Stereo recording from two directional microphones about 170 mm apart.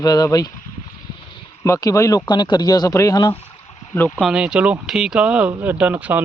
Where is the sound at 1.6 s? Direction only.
20° left (ahead or behind).